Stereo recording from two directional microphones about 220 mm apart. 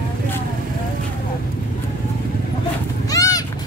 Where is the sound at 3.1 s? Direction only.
15° left (ahead or behind).